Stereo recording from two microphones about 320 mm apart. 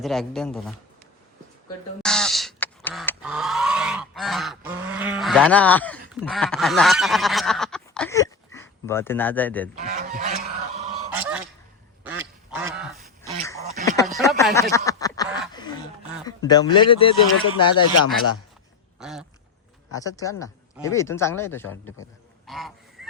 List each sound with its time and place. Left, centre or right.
0.0 s a man's voice: centre
2.0 s a sound: centre
6.1 s speech: centre
9.7 s goose: right
11.1 s goose: centre
12.0 s duck: centre
13.8 s a sound: centre
14.2 s snicker: centre
16.2 s speech: centre
18.9 s duck: centre
19.9 s speech: centre
22.4 s goose: centre